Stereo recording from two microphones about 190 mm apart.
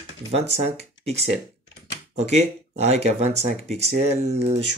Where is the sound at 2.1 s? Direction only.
35° right (ahead or behind).